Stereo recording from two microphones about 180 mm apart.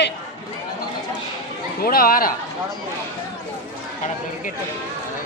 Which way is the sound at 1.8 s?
55° left (ahead or behind).